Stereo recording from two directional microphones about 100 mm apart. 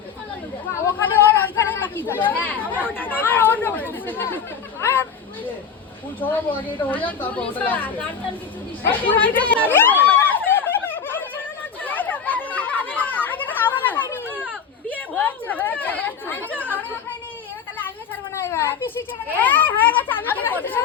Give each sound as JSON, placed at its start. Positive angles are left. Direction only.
{"t": 0.7, "sound": "a sound", "side_deg": 20}
{"t": 2.8, "sound": "chatter", "side_deg": 20}
{"t": 6.1, "sound": "a woman's voice", "side_deg": 15}
{"t": 8.8, "sound": "chatter", "side_deg": 20}
{"t": 17.8, "sound": "a sound", "side_deg": 20}
{"t": 20.2, "sound": "chatter", "side_deg": 20}